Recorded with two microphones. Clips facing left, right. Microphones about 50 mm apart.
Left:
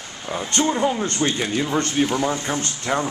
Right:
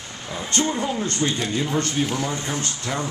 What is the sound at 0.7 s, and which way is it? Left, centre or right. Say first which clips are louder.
Speech: left 4 dB; centre.